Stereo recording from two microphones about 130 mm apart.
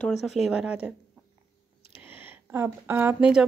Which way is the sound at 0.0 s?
Centre (ahead or behind).